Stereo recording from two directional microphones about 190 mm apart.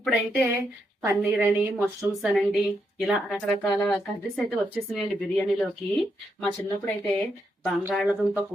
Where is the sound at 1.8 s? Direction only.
5° left (ahead or behind).